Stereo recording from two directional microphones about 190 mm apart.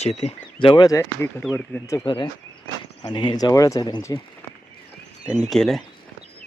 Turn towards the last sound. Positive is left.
turn(degrees=0)  # may be behind; listen again after turning